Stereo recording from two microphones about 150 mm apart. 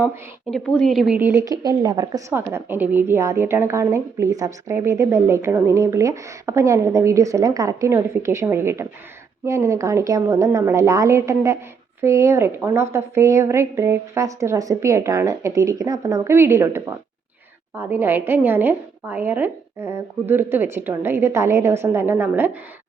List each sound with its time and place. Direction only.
0.5 s a woman's voice: 5° left (ahead or behind)
1.2 s speech: 20° right (ahead or behind)
2.3 s a woman's voice: 15° right (ahead or behind)